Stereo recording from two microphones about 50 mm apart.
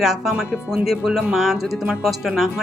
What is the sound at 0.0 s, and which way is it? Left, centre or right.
A woman's voice, centre.